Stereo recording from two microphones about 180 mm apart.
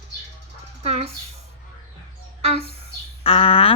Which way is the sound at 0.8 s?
35° right (ahead or behind).